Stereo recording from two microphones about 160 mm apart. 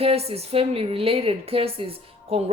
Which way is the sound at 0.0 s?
40° right (ahead or behind).